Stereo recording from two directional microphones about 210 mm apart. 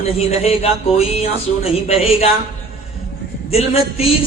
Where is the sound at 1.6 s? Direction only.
30° left (ahead or behind).